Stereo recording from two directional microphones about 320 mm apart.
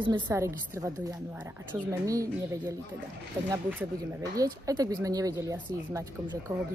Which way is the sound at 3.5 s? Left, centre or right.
Centre.